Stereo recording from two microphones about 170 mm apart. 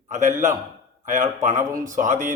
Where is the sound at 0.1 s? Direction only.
45° right (ahead or behind).